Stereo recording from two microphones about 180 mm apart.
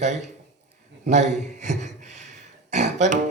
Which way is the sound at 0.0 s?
40° right (ahead or behind).